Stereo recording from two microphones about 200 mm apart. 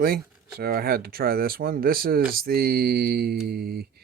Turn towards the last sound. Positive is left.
turn(degrees=-50)  # may be behind; listen again after turning